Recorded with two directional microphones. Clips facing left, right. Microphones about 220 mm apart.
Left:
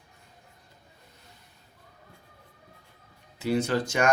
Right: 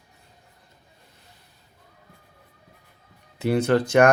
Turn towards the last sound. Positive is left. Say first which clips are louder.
# right 8 dB
turn(degrees=-60)  # may be behind; listen again after turning